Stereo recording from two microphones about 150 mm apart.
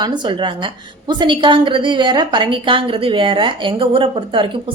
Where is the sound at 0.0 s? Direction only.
30° right (ahead or behind).